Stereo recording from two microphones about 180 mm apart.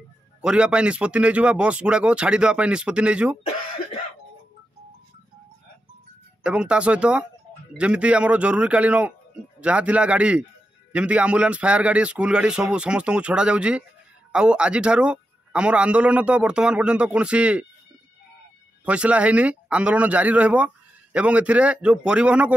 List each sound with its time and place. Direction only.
0.4 s a man's voice: 5° right (ahead or behind)
6.4 s a man's voice: 5° right (ahead or behind)
18.9 s speech: 5° right (ahead or behind)